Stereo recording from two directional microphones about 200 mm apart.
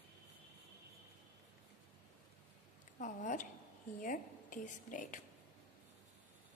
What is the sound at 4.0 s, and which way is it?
A woman's voice, 40° left (ahead or behind).